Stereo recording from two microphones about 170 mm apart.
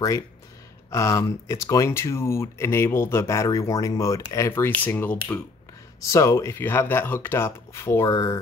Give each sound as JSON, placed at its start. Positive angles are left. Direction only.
{"t": 0.8, "sound": "speech", "side_deg": 20}